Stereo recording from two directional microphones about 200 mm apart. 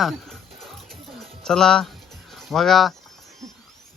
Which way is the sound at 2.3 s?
Centre (ahead or behind).